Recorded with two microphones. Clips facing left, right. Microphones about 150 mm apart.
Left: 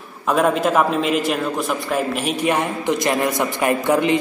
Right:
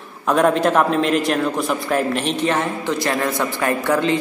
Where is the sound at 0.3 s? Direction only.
Centre (ahead or behind).